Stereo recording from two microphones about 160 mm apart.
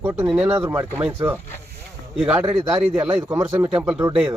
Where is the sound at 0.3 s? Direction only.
10° right (ahead or behind).